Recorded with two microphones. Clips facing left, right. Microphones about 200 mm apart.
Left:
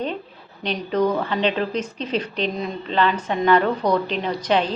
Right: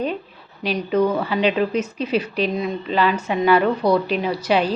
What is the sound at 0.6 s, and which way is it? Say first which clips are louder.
A woman's voice: right 2 dB; 5° right (ahead or behind).